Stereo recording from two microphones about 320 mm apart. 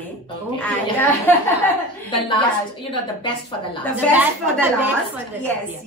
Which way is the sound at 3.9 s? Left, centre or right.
Centre.